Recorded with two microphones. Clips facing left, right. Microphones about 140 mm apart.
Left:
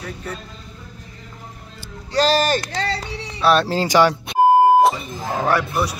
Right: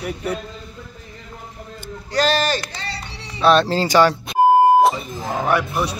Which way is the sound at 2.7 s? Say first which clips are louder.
Left 7 dB; 90° left.